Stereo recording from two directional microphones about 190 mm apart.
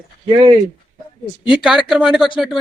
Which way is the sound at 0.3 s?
25° right (ahead or behind).